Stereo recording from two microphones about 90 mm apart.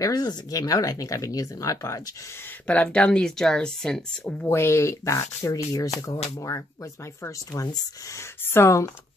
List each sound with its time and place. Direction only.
0.0 s speech: 45° left (ahead or behind)
2.6 s speech: 15° left (ahead or behind)
4.4 s speech: 30° left (ahead or behind)